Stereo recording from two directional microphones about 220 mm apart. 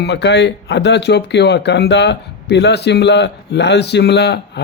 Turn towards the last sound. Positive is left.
turn(degrees=50)  # may be behind; listen again after turning